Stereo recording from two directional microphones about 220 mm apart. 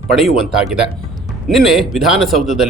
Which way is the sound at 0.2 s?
Centre (ahead or behind).